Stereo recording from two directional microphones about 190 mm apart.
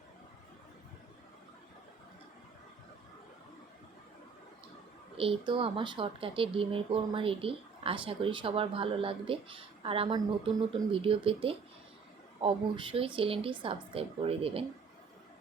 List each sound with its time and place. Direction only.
5.1 s speech: 30° right (ahead or behind)